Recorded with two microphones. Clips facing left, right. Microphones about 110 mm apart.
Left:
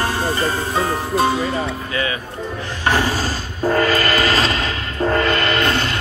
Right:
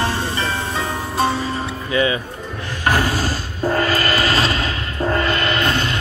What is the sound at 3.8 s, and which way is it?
Train, 45° left (ahead or behind).